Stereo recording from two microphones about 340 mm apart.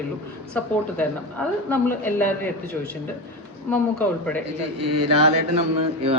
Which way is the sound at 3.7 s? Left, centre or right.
Centre.